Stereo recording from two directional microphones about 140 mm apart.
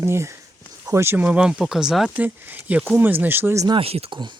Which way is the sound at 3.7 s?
45° right (ahead or behind).